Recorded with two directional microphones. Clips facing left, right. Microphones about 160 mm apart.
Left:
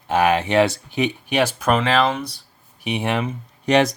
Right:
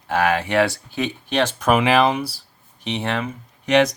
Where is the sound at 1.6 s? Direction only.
10° right (ahead or behind).